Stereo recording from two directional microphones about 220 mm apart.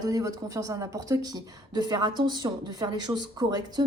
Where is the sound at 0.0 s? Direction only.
15° right (ahead or behind).